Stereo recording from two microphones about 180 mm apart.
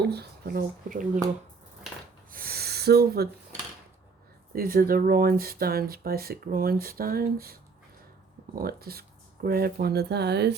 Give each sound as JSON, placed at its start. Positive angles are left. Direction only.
{"t": 0.0, "sound": "speech", "side_deg": -65}
{"t": 2.3, "sound": "a sound", "side_deg": -55}
{"t": 4.5, "sound": "speech", "side_deg": -55}